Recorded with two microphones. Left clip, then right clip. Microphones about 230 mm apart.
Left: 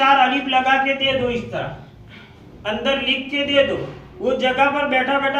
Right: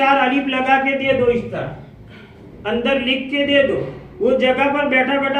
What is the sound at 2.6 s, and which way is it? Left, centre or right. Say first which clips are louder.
Speech: right 2 dB; left.